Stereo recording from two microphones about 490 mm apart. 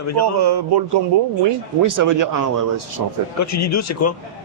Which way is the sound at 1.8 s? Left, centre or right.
Right.